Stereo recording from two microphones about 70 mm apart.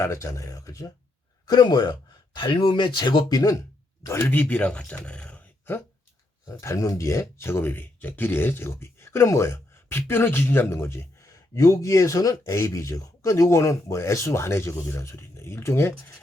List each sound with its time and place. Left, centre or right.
0.0 s speech: left
1.5 s speech: left
4.0 s speech: left
4.3 s speech: left
6.5 s speech: left